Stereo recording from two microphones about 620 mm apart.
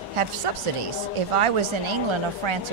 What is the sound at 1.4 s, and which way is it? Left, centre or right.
Speech, right.